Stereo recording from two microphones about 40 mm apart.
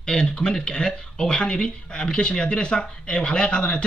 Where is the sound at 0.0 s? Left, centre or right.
Left.